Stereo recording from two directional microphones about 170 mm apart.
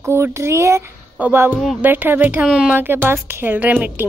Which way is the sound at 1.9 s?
10° right (ahead or behind).